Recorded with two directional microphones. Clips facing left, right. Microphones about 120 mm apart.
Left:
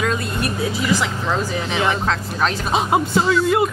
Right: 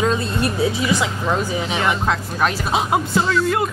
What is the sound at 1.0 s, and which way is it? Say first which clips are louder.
Speech: right 1 dB; 15° right (ahead or behind).